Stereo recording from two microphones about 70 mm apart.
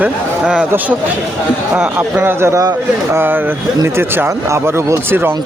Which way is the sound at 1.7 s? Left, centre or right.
Right.